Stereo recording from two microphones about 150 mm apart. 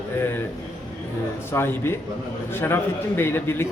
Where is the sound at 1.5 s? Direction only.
15° left (ahead or behind).